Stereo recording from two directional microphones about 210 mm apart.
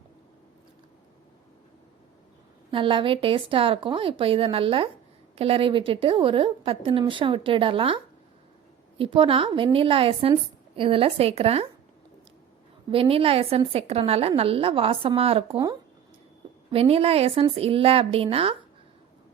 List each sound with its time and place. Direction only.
2.6 s a woman's voice: 25° right (ahead or behind)
12.9 s a woman's voice: 25° right (ahead or behind)
16.7 s a woman's voice: 30° right (ahead or behind)